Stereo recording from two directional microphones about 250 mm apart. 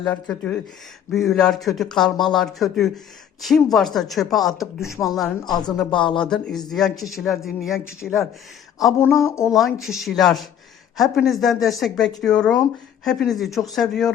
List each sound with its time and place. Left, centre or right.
0.0 s speech: centre
4.8 s a sound: centre
5.0 s speech: centre
5.9 s speech: centre
6.2 s speech: centre
8.9 s a sound: centre
9.5 s speech: centre